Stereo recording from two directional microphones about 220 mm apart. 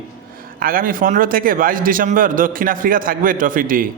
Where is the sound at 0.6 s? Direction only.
40° right (ahead or behind).